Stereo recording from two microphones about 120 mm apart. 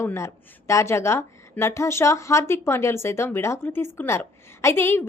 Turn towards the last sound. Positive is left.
turn(degrees=20)  # may be behind; listen again after turning